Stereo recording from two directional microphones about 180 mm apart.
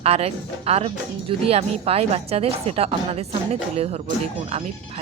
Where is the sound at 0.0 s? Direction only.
35° right (ahead or behind).